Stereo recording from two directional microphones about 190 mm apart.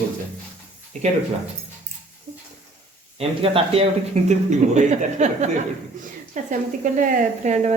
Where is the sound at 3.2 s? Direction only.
30° right (ahead or behind).